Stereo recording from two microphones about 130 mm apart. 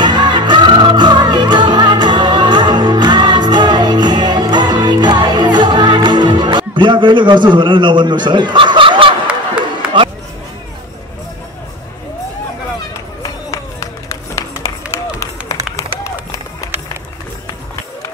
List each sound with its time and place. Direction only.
0.0 s music: 35° right (ahead or behind)
13.5 s run: 25° left (ahead or behind)